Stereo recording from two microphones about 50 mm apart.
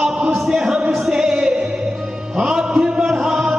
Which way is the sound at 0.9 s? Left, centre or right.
Centre.